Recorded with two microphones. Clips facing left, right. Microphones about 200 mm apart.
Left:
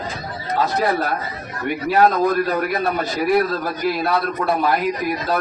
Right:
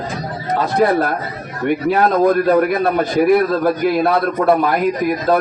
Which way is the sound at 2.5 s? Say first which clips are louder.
Right 7 dB; 55° right (ahead or behind).